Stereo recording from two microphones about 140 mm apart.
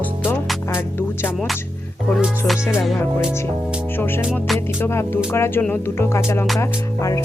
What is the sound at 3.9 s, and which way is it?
Speech, 15° left (ahead or behind).